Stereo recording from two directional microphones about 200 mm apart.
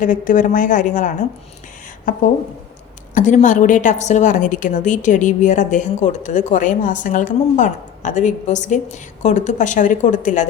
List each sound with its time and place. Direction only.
0.0 s a woman's voice: 40° left (ahead or behind)
3.2 s a woman's voice: 40° left (ahead or behind)